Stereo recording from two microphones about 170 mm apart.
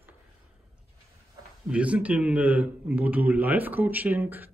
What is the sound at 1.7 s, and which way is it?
Speech, 5° right (ahead or behind).